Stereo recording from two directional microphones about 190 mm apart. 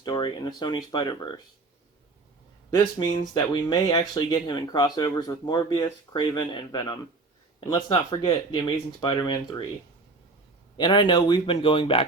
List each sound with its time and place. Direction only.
0.0 s speech: 20° left (ahead or behind)
2.6 s speech: 20° left (ahead or behind)
10.8 s speech: 25° left (ahead or behind)